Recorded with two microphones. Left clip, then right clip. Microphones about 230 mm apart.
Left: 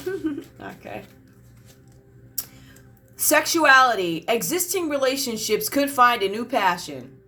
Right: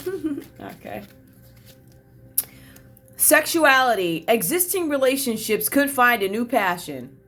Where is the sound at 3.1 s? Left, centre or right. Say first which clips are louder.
Right 2 dB; right.